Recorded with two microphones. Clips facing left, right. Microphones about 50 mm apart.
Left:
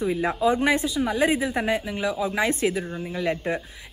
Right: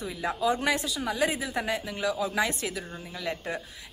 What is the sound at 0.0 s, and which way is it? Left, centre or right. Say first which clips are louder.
Speech: left 6 dB; left.